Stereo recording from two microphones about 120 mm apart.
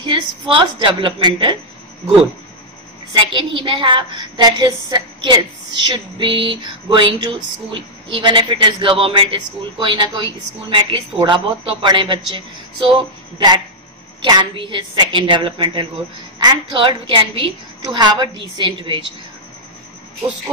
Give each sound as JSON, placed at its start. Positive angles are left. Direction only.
{"t": 0.0, "sound": "a woman's voice", "side_deg": -40}
{"t": 3.1, "sound": "a woman's voice", "side_deg": -40}